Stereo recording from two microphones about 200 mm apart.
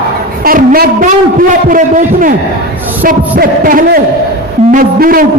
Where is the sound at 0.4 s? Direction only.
45° right (ahead or behind).